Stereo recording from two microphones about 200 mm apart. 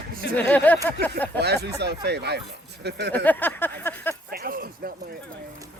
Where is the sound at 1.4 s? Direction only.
55° right (ahead or behind).